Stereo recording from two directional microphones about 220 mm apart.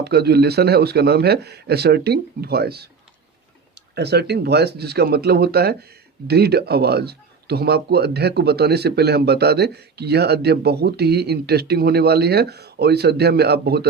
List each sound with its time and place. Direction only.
0.0 s speech: 50° right (ahead or behind)
3.9 s speech: 50° right (ahead or behind)